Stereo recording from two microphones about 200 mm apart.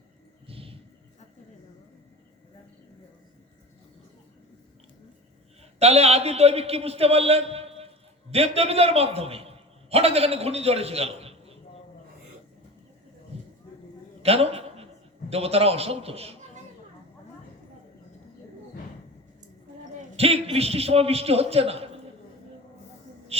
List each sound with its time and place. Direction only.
0.4 s thunder: 30° right (ahead or behind)
5.8 s a man's voice: 30° right (ahead or behind)
14.2 s a sound: 30° right (ahead or behind)
15.3 s a man's voice: 30° right (ahead or behind)
20.1 s a man's voice: 30° right (ahead or behind)
23.3 s music: 30° right (ahead or behind)